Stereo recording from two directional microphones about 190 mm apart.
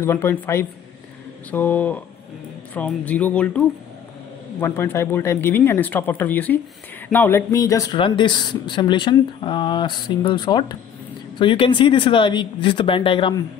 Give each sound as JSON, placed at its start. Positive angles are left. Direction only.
{"t": 0.0, "sound": "speech", "side_deg": 15}